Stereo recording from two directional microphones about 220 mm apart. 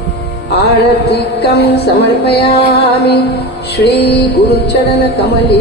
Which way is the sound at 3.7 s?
50° left (ahead or behind).